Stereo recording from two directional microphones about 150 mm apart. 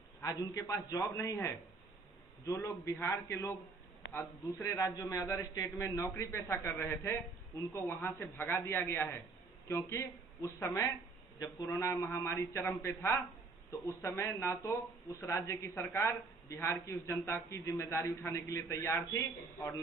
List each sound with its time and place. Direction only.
0.2 s a man's voice: 20° left (ahead or behind)